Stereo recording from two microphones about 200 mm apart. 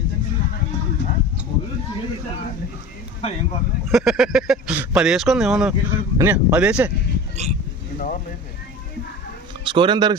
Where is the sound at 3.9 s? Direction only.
Centre (ahead or behind).